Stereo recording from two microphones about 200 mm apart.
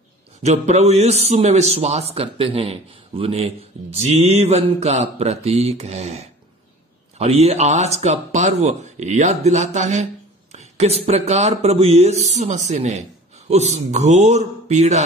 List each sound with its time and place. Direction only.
0.4 s a man's voice: 35° right (ahead or behind)
10.5 s a sound: 35° right (ahead or behind)
11.1 s a man's voice: 35° right (ahead or behind)